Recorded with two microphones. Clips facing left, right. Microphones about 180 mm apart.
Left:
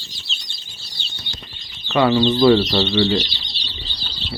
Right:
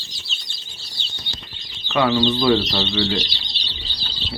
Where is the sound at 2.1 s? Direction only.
20° left (ahead or behind).